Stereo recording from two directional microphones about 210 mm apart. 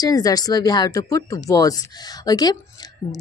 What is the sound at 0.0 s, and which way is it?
Speech, 20° left (ahead or behind).